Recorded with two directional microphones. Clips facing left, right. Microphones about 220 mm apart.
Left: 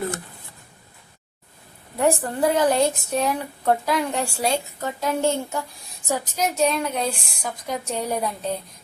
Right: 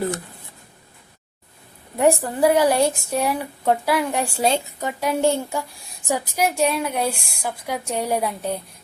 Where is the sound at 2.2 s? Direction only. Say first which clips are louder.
Right 3 dB; 10° right (ahead or behind).